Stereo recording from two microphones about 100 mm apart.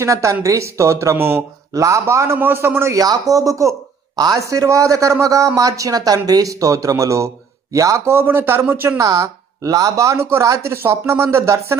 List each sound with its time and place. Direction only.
0.0 s a man's voice: 30° right (ahead or behind)
1.7 s speech: 35° right (ahead or behind)
3.0 s a man's voice: 35° right (ahead or behind); by 9.0 s 20° right (ahead or behind)
9.0 s speech: 35° right (ahead or behind)